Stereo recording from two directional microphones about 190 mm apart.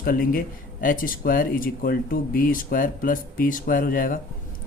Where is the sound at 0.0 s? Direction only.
50° left (ahead or behind).